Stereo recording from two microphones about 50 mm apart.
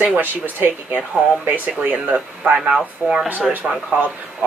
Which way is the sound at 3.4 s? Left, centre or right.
Centre.